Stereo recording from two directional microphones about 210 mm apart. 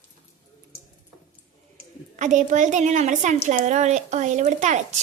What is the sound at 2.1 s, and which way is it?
A child's voice, 35° right (ahead or behind).